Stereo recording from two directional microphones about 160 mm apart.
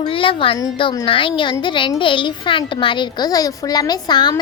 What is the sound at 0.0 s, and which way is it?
A child's voice, 35° left (ahead or behind).